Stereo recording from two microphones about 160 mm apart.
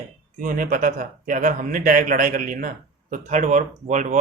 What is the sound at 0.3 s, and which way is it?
Speech, 60° right (ahead or behind).